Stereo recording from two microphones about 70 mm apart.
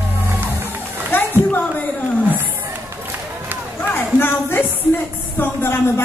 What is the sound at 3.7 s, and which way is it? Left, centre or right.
Music, left.